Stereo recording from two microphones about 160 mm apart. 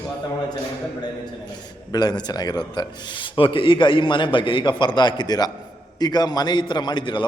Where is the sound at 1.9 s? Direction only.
25° left (ahead or behind).